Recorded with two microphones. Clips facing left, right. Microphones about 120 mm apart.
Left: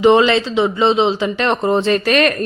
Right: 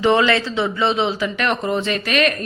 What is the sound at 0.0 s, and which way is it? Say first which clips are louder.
Speech: left 5 dB; 20° left (ahead or behind).